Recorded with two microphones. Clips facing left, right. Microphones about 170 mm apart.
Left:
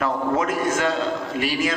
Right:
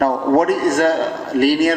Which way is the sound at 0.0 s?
40° right (ahead or behind).